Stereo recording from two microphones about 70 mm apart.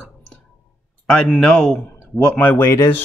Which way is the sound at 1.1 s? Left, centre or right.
Centre.